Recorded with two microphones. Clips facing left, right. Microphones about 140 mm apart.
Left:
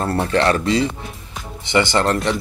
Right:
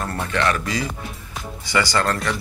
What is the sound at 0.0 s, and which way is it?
Speech, 35° left (ahead or behind).